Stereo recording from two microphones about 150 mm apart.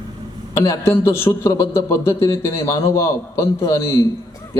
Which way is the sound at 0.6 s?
20° left (ahead or behind).